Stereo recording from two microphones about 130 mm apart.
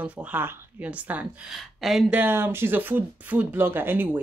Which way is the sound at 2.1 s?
15° right (ahead or behind).